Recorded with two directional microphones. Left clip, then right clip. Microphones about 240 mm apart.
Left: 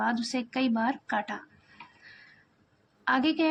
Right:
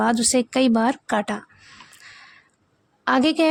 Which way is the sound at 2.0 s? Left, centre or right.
Right.